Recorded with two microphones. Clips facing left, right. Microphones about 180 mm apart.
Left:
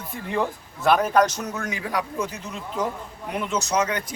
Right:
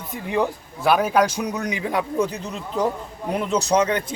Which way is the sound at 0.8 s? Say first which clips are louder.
Right 1 dB; 10° right (ahead or behind).